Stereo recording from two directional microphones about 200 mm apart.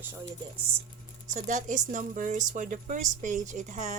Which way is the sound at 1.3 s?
40° right (ahead or behind).